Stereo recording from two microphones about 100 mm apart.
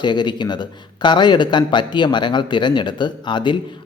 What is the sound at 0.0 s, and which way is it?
Speech, 50° left (ahead or behind).